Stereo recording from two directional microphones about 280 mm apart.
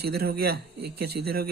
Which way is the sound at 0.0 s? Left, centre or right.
Right.